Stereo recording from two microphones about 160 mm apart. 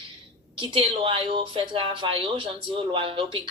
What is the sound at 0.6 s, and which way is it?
A woman's voice, 35° right (ahead or behind).